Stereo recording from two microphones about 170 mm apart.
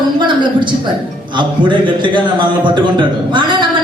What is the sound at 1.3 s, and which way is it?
A man's voice, 25° right (ahead or behind).